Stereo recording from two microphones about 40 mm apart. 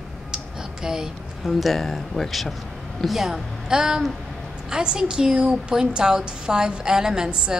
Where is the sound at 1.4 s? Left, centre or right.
Centre.